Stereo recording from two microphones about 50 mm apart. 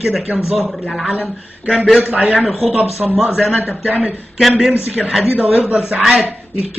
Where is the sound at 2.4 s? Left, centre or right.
Centre.